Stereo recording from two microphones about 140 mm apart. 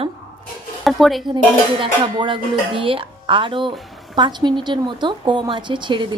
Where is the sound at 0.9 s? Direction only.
Centre (ahead or behind).